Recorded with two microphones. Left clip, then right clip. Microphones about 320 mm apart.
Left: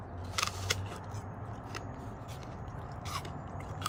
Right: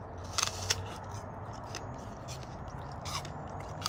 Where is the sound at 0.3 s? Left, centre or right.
Centre.